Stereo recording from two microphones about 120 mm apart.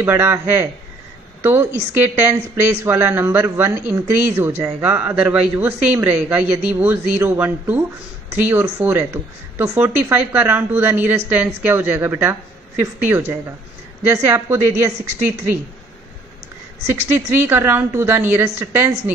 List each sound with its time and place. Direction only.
0.0 s a man's voice: 20° right (ahead or behind)
17.4 s speech: 15° right (ahead or behind)